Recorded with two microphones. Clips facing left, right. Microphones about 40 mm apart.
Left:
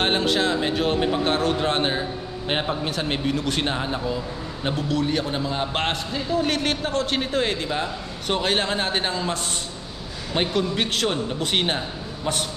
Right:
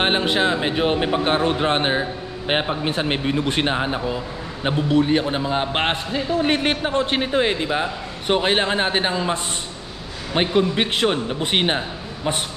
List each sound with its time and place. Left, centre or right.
0.0 s a man's voice: right